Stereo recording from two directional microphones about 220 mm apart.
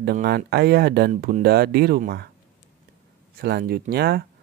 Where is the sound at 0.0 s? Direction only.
45° right (ahead or behind).